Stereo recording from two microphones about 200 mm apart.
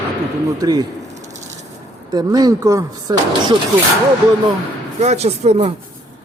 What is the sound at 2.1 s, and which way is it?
Speech, 20° right (ahead or behind).